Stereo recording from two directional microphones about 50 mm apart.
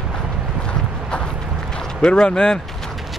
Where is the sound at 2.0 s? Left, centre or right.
Centre.